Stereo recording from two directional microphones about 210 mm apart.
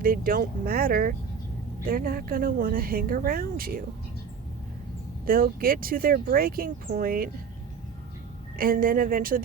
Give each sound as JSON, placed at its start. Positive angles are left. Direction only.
{"t": 0.0, "sound": "speech", "side_deg": -45}
{"t": 5.2, "sound": "speech", "side_deg": -45}
{"t": 8.5, "sound": "speech", "side_deg": -45}